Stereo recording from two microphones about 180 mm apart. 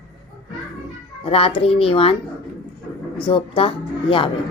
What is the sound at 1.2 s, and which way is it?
Speech, 30° left (ahead or behind).